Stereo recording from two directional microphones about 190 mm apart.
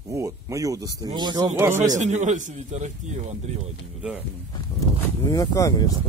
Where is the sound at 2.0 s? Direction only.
40° right (ahead or behind).